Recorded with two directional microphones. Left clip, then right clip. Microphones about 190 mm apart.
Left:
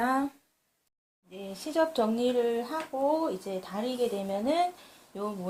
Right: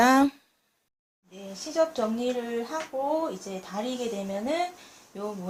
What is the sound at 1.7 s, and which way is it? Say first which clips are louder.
Speech: right 1 dB; 45° left (ahead or behind).